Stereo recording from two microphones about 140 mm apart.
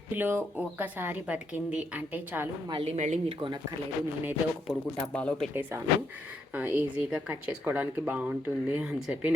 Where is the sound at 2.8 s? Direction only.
55° right (ahead or behind).